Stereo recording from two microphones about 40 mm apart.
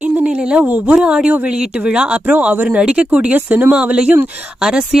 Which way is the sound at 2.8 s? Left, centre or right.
Right.